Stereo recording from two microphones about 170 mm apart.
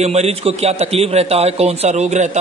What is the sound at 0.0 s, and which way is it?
A man's voice, 40° right (ahead or behind).